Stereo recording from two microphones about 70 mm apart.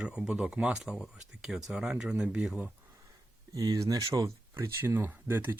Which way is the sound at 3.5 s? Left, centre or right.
Right.